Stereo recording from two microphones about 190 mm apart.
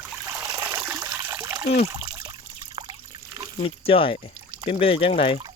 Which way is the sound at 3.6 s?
30° left (ahead or behind).